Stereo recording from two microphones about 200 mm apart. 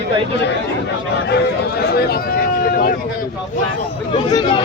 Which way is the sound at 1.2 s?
55° left (ahead or behind).